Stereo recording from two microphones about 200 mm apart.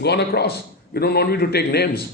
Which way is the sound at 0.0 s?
55° left (ahead or behind).